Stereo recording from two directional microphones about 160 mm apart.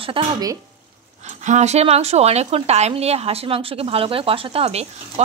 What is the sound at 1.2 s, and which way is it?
A woman's voice, 45° right (ahead or behind).